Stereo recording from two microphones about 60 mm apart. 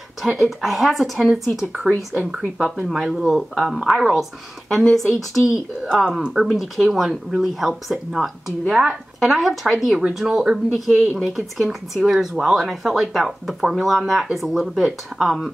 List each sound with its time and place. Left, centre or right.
0.2 s speech: centre
5.9 s speech: centre
8.6 s speech: centre
9.2 s speech: centre
9.9 s speech: centre